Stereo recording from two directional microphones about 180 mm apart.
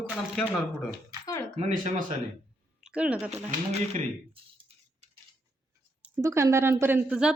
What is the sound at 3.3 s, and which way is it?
Speech, 35° right (ahead or behind).